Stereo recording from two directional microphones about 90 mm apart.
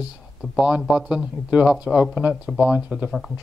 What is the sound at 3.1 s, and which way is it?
Speech, 5° left (ahead or behind).